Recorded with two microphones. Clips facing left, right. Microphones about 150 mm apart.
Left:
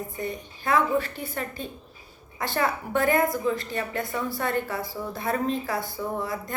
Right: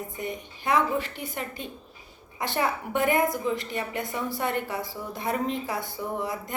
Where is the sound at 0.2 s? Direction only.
20° right (ahead or behind).